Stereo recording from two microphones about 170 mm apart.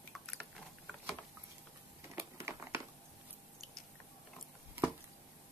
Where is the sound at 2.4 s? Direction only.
15° right (ahead or behind).